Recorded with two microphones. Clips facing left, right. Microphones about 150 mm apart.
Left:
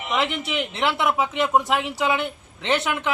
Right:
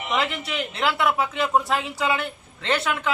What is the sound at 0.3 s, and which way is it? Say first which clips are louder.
A man's voice: left 2 dB; 20° left (ahead or behind).